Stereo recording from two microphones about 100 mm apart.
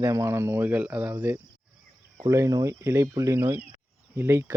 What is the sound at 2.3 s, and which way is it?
Speech, 30° right (ahead or behind).